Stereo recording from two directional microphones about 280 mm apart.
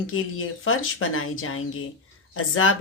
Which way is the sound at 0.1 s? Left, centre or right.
Left.